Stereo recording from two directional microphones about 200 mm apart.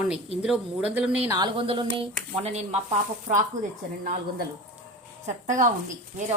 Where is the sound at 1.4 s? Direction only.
25° right (ahead or behind).